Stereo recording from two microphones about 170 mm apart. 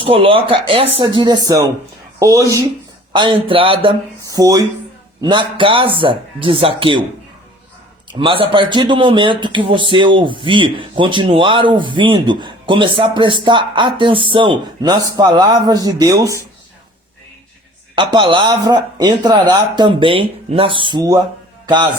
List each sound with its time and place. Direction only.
0.0 s speech: 30° right (ahead or behind)
3.1 s speech: 30° right (ahead or behind)
4.4 s speech: 20° right (ahead or behind)
8.2 s speech: 30° right (ahead or behind)
17.9 s speech: 30° right (ahead or behind)